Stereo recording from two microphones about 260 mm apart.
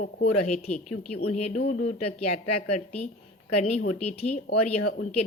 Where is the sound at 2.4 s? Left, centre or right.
Left.